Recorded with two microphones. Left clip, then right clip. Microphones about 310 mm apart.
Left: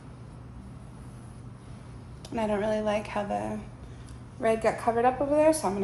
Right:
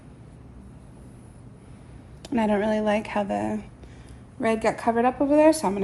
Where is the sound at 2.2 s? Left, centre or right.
Right.